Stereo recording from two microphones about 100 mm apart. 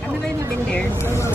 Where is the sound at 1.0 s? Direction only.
25° left (ahead or behind).